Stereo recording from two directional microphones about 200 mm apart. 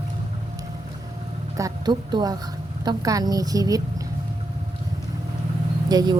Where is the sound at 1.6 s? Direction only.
20° right (ahead or behind).